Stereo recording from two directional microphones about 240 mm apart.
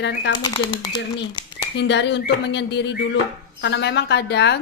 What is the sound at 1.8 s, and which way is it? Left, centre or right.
A woman's voice, left.